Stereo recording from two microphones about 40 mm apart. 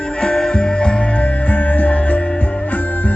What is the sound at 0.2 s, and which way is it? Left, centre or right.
Music, left.